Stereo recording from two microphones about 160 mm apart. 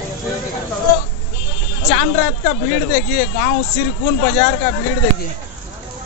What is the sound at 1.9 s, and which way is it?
A woman's voice, 50° left (ahead or behind).